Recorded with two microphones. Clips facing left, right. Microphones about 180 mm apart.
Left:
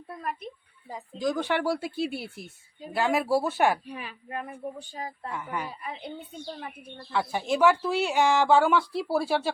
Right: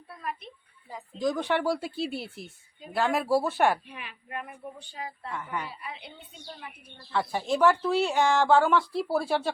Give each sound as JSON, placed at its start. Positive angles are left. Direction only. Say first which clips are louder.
{"t": 0.2, "sound": "a woman's voice", "louder": "left 2 dB", "side_deg": 45}
{"t": 1.2, "sound": "speech", "louder": "even", "side_deg": 0}
{"t": 3.8, "sound": "speech", "louder": "left 5 dB", "side_deg": 40}
{"t": 5.3, "sound": "speech", "louder": "even", "side_deg": 10}
{"t": 5.8, "sound": "a woman's voice", "louder": "left 5 dB", "side_deg": 45}
{"t": 7.1, "sound": "speech", "louder": "even", "side_deg": 5}